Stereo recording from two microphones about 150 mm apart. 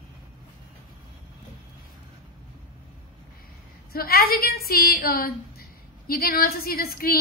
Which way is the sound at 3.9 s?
90° left.